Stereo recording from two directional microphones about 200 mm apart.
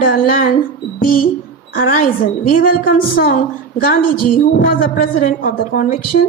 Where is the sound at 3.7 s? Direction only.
45° left (ahead or behind).